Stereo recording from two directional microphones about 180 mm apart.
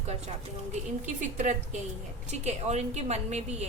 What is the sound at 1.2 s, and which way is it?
A woman's voice, 45° right (ahead or behind).